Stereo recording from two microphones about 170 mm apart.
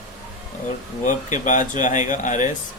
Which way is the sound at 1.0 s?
45° left (ahead or behind).